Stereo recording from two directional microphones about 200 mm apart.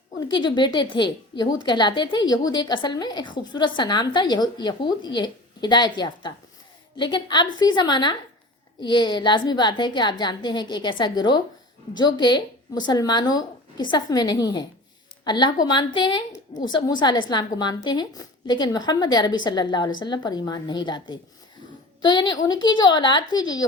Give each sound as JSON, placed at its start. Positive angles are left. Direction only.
{"t": 0.2, "sound": "a woman's voice", "side_deg": 20}